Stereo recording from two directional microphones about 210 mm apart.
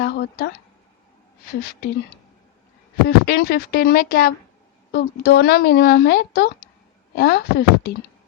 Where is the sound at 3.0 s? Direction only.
50° left (ahead or behind).